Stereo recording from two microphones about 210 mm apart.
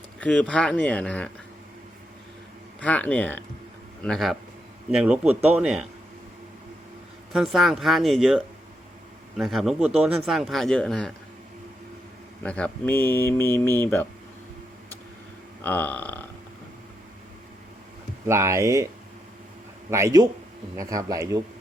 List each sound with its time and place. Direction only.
0.2 s speech: 5° left (ahead or behind)
2.8 s speech: 5° left (ahead or behind)
7.3 s speech: centre (ahead or behind)
12.4 s speech: 5° left (ahead or behind)
15.6 s burping: 10° left (ahead or behind)
18.3 s speech: 15° right (ahead or behind)
19.9 s speech: 15° right (ahead or behind)